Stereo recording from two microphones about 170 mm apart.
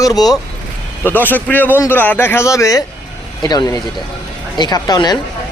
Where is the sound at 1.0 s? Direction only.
10° left (ahead or behind).